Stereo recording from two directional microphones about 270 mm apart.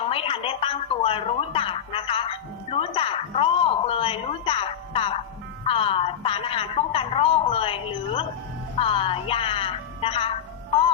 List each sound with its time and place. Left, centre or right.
0.0 s a woman's voice: centre